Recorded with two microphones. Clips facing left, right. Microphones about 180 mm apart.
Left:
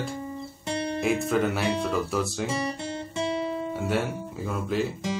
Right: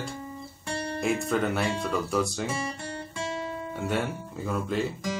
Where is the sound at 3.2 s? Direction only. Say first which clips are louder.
Left 6 dB; 20° left (ahead or behind).